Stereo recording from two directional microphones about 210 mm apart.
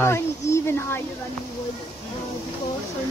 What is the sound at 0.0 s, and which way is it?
A woman's voice, 10° left (ahead or behind).